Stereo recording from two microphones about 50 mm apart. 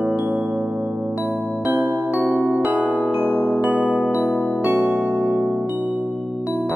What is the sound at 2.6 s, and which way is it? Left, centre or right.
Music, centre.